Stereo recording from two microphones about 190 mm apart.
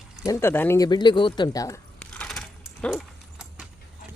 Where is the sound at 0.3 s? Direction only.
15° left (ahead or behind).